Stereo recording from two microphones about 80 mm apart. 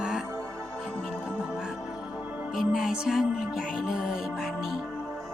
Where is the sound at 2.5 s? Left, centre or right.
Centre.